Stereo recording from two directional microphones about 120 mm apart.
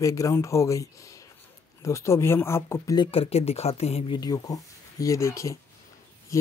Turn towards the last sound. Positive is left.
turn(degrees=25)  # may be behind; listen again after turning